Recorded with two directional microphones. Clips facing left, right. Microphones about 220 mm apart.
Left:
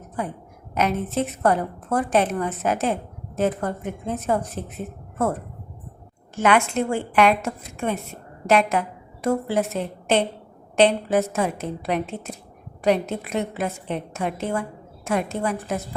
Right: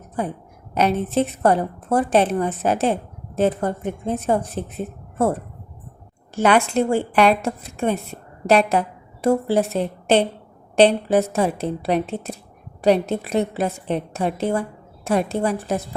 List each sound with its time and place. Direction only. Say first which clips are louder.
0.7 s a woman's voice: right 4 dB; 30° right (ahead or behind)
6.3 s a woman's voice: right 3 dB; 35° right (ahead or behind)